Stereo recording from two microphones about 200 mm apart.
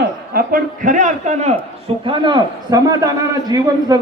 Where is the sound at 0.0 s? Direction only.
45° right (ahead or behind).